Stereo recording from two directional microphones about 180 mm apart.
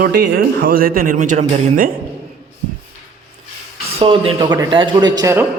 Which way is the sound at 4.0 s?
30° right (ahead or behind).